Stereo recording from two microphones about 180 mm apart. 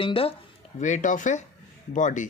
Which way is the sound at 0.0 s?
30° left (ahead or behind).